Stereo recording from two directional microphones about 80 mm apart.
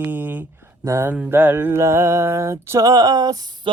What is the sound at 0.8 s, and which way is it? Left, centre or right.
Speech, right.